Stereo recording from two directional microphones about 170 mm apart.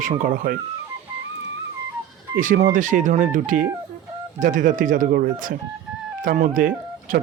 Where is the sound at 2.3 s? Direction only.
50° right (ahead or behind).